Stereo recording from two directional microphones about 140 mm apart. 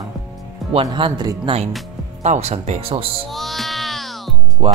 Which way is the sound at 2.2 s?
50° right (ahead or behind).